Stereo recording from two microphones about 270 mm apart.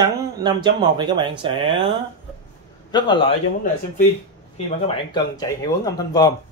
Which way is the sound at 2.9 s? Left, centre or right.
Centre.